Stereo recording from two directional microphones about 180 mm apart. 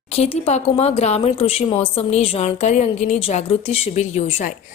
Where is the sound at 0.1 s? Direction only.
35° left (ahead or behind).